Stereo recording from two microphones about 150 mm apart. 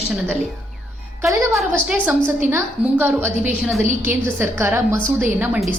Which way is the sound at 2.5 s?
15° right (ahead or behind).